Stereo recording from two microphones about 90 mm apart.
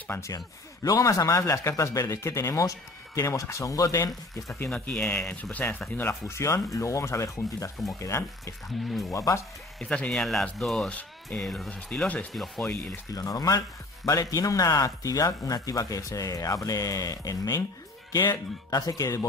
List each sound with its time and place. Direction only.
0.8 s speech: 40° left (ahead or behind)
4.6 s speech: 10° left (ahead or behind); by 9.4 s 35° left (ahead or behind)
9.8 s speech: 10° left (ahead or behind)
11.9 s speech: 15° left (ahead or behind)
13.1 s speech: 40° left (ahead or behind)